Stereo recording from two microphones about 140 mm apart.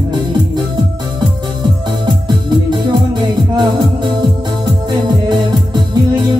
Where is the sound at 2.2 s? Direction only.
30° right (ahead or behind).